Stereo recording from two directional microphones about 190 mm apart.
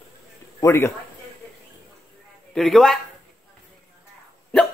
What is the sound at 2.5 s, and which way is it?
Speech, centre (ahead or behind).